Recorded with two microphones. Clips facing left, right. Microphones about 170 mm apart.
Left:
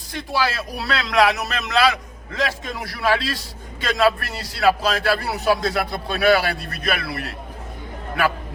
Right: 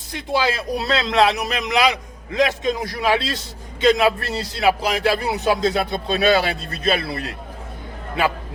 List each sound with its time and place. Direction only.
0.3 s a man's voice: 20° right (ahead or behind)